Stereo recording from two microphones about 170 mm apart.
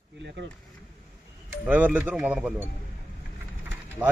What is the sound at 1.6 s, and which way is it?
Speech, 10° right (ahead or behind).